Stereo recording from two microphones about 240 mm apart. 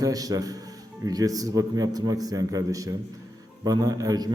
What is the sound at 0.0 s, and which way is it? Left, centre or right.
A man's voice, centre.